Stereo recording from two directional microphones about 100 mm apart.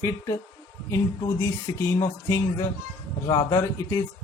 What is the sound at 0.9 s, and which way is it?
A man's voice, 25° left (ahead or behind).